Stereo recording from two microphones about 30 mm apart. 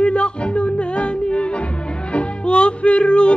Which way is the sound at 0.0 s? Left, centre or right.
Left.